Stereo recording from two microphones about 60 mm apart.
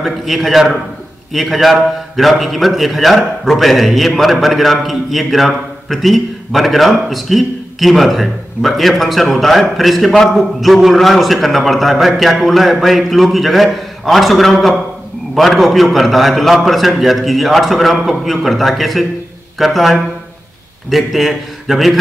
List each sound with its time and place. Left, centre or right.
0.0 s a man's voice: centre